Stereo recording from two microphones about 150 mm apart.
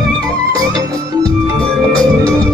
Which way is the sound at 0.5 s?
25° right (ahead or behind).